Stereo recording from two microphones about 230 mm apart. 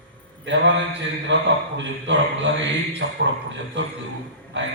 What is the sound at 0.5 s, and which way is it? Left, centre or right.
A man's voice, right.